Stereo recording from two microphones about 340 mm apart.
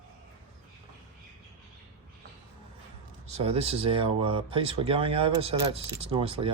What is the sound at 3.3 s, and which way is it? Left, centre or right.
Speech, centre.